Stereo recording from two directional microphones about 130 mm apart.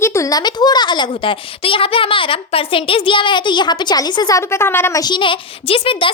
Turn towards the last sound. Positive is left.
turn(degrees=45)  # may be behind; listen again after turning